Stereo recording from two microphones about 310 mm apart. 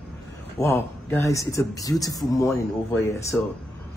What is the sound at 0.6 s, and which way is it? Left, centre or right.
Speech, centre.